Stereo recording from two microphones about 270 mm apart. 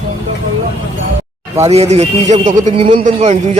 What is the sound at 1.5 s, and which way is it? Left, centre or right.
Speech, right.